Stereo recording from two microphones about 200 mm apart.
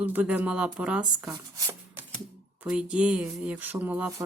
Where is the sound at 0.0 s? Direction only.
10° right (ahead or behind).